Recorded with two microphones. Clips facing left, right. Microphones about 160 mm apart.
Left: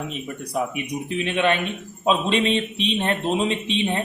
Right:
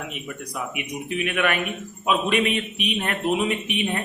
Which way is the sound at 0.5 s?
30° left (ahead or behind).